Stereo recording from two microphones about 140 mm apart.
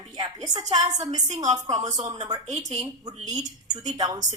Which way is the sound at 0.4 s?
30° right (ahead or behind).